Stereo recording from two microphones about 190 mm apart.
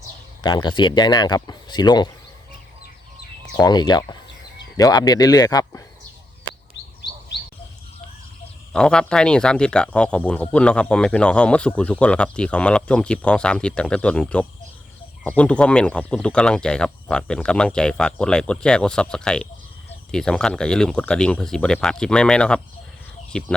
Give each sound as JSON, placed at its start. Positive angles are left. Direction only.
{"t": 0.4, "sound": "speech", "side_deg": 25}
{"t": 3.6, "sound": "speech", "side_deg": 20}
{"t": 8.7, "sound": "speech", "side_deg": 5}